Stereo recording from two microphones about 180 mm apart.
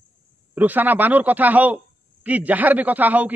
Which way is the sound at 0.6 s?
10° right (ahead or behind).